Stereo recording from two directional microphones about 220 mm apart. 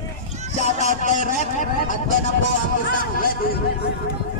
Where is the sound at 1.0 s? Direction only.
35° left (ahead or behind).